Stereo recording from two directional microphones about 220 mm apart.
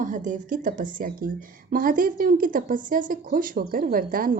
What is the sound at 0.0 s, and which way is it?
A woman's voice, 35° right (ahead or behind).